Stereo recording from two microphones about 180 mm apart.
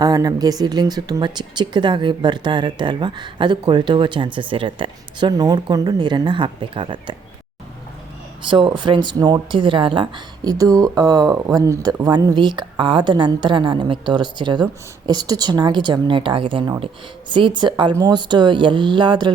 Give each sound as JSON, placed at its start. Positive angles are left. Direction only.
{"t": 0.0, "sound": "speech", "side_deg": -20}
{"t": 8.4, "sound": "speech", "side_deg": -25}